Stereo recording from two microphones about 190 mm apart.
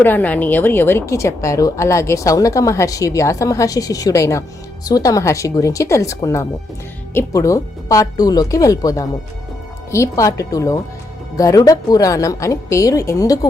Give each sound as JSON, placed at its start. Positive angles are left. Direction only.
{"t": 0.0, "sound": "a woman's voice", "side_deg": 10}